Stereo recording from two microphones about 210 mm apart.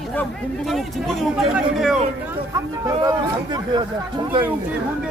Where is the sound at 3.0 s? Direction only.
20° right (ahead or behind).